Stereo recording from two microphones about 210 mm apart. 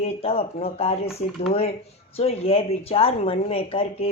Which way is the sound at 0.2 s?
25° left (ahead or behind).